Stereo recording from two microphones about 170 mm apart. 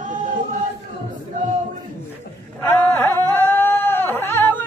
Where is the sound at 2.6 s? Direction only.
10° left (ahead or behind).